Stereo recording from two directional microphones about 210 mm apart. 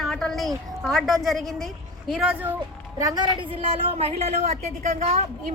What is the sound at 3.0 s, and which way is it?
A woman's voice, 15° right (ahead or behind).